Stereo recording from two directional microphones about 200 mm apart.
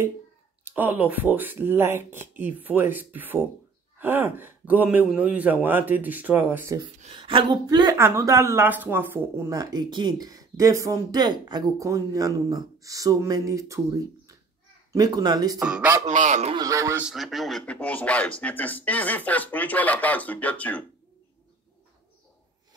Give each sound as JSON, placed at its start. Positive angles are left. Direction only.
{"t": 0.7, "sound": "speech", "side_deg": -10}
{"t": 7.0, "sound": "speech", "side_deg": -25}
{"t": 15.6, "sound": "speech", "side_deg": -5}
{"t": 16.1, "sound": "a man's voice", "side_deg": -40}
{"t": 16.5, "sound": "a man's voice", "side_deg": -15}